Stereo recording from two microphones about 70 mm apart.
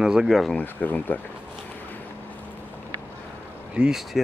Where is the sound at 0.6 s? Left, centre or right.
Left.